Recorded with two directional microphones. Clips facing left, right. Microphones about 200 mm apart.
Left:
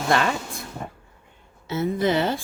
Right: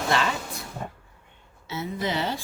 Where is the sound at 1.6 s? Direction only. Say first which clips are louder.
Left 7 dB; 50° left (ahead or behind).